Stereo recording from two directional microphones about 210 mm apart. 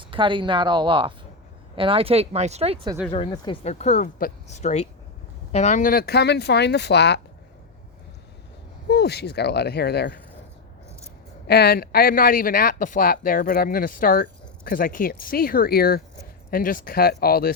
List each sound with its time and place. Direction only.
0.0 s speech: 25° right (ahead or behind)
3.1 s speech: 20° left (ahead or behind); by 7.2 s 55° left (ahead or behind)
8.9 s speech: 50° left (ahead or behind)
11.4 s speech: 50° left (ahead or behind)